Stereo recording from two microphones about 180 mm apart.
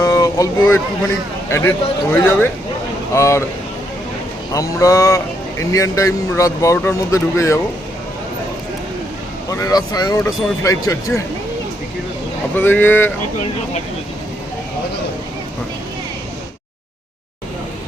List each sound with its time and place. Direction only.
0.0 s a sound: 20° left (ahead or behind)
1.5 s a man's voice: 15° left (ahead or behind)
4.5 s a man's voice: 20° left (ahead or behind)
9.5 s speech: 20° left (ahead or behind)
12.5 s a man's voice: 10° left (ahead or behind)